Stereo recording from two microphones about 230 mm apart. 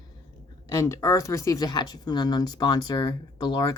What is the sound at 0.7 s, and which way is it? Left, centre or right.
Speech, centre.